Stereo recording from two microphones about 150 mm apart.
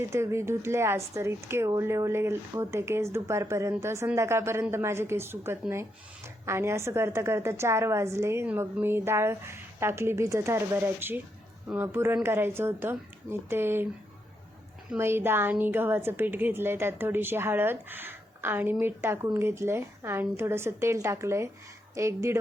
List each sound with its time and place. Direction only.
0.1 s a woman's voice: 20° right (ahead or behind)
14.9 s a woman's voice: 15° right (ahead or behind)